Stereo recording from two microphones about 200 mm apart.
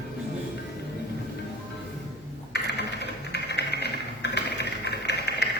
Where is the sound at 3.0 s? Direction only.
55° left (ahead or behind).